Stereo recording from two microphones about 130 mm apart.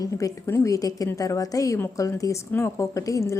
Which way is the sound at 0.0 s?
25° left (ahead or behind).